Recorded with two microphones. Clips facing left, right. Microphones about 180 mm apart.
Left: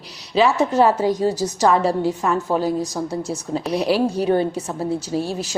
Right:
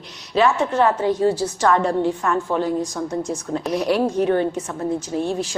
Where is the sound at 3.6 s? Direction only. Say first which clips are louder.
Left 1 dB; centre (ahead or behind).